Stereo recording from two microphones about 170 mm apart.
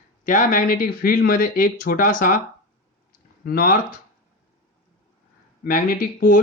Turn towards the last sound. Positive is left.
turn(degrees=55)  # may be behind; listen again after turning